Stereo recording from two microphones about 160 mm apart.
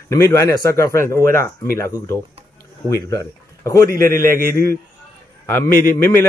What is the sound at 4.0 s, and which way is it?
Speech, 60° right (ahead or behind).